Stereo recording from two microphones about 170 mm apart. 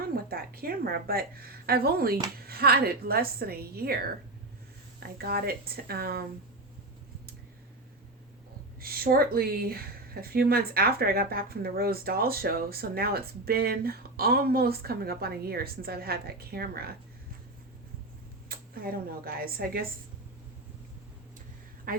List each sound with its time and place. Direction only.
0.3 s speech: 60° right (ahead or behind)
8.8 s speech: 60° right (ahead or behind)
18.4 s speech: 60° right (ahead or behind)
21.9 s speech: 55° right (ahead or behind)